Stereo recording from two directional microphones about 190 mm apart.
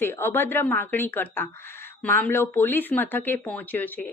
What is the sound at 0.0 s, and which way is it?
Speech, 10° left (ahead or behind).